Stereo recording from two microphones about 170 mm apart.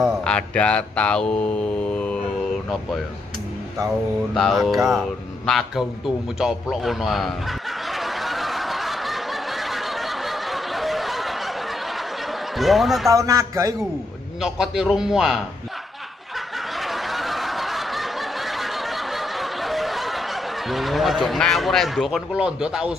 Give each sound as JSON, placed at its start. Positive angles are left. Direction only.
{"t": 0.0, "sound": "mantra", "side_deg": 0}
{"t": 4.3, "sound": "mantra", "side_deg": 0}
{"t": 7.9, "sound": "snicker", "side_deg": 0}
{"t": 12.5, "sound": "mantra", "side_deg": 0}
{"t": 13.1, "sound": "speech", "side_deg": -20}
{"t": 14.4, "sound": "mantra", "side_deg": 0}
{"t": 16.8, "sound": "snicker", "side_deg": 0}